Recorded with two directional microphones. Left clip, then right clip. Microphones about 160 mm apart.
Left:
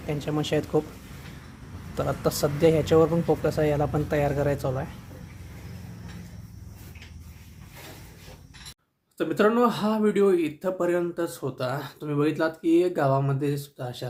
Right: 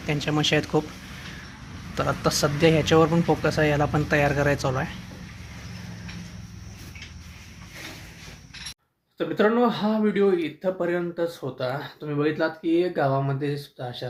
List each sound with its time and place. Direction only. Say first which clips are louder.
0.0 s speech: right 5 dB; centre (ahead or behind)
2.2 s speech: right 1 dB; 10° left (ahead or behind)
9.1 s speech: even; 20° left (ahead or behind)